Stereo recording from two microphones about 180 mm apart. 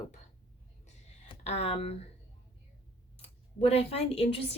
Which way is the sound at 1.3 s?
35° left (ahead or behind).